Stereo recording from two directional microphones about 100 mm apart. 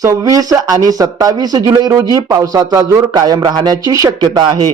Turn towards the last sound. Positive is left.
turn(degrees=-50)  # may be behind; listen again after turning